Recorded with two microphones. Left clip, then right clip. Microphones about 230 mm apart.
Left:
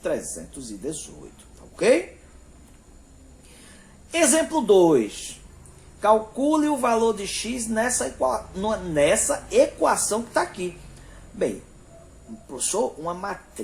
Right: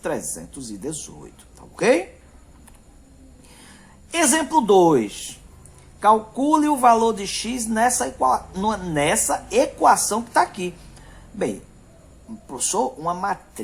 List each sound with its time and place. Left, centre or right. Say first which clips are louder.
0.0 s a man's voice: even; right
3.7 s a woman's voice: even; right
12.5 s a man's voice: right 2 dB; right